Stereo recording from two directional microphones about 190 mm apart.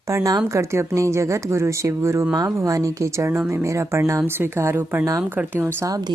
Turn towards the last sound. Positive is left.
turn(degrees=-15)  # may be behind; listen again after turning